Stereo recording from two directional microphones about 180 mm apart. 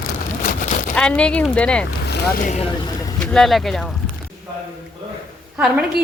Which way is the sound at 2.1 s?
50° left (ahead or behind).